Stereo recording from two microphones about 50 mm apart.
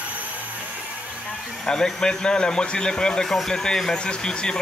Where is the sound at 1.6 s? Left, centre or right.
Centre.